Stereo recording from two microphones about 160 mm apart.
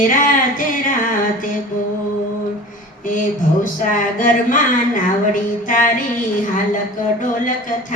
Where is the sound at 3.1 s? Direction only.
55° left (ahead or behind).